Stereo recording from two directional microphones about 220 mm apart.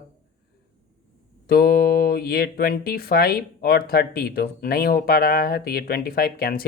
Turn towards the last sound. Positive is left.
turn(degrees=45)  # may be behind; listen again after turning